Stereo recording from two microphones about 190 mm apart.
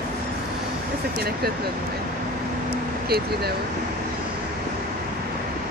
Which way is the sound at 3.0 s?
55° right (ahead or behind).